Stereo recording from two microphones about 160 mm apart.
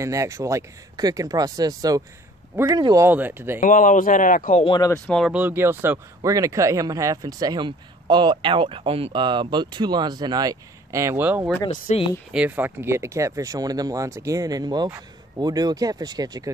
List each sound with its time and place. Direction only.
0.0 s speech: 20° right (ahead or behind)
3.6 s speech: 55° left (ahead or behind)
4.6 s speech: 25° left (ahead or behind)
4.9 s speech: 5° left (ahead or behind)
5.3 s speech: 10° right (ahead or behind)
11.7 s speech: 40° left (ahead or behind)
12.3 s speech: 10° right (ahead or behind); by 16.4 s 25° right (ahead or behind)